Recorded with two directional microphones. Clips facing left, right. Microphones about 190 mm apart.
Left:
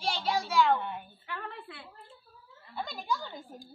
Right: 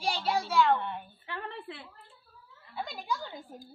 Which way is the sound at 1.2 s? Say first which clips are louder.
Right 3 dB; 25° right (ahead or behind).